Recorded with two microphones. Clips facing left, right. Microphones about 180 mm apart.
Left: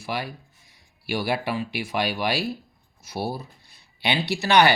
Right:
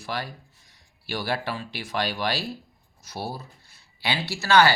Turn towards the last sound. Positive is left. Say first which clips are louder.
# left 1 dB
turn(degrees=15)  # may be behind; listen again after turning